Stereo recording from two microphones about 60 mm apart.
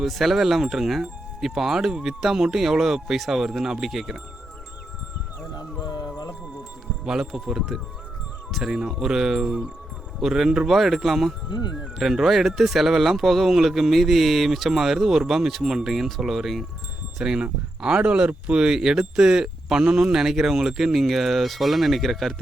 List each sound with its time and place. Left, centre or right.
0.0 s speech: centre
7.0 s speech: centre